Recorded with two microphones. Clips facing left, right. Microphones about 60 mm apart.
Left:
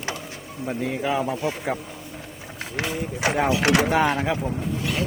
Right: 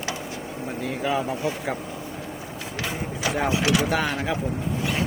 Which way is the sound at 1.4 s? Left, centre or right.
Centre.